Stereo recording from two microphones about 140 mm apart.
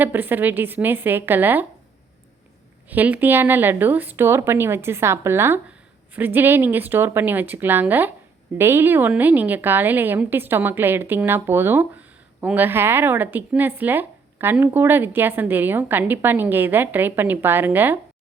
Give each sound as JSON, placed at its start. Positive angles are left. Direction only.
{"t": 0.0, "sound": "speech", "side_deg": -15}
{"t": 2.9, "sound": "speech", "side_deg": -10}